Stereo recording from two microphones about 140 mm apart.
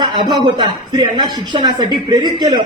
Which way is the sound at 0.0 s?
30° right (ahead or behind).